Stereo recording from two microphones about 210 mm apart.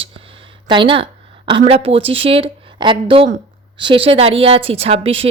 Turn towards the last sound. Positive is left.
turn(degrees=-30)  # may be behind; listen again after turning